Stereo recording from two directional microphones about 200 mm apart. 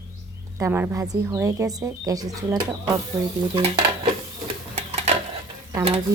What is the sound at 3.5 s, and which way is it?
Dishes, 25° right (ahead or behind).